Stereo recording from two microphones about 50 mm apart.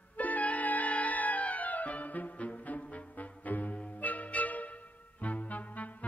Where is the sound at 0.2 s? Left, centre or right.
Left.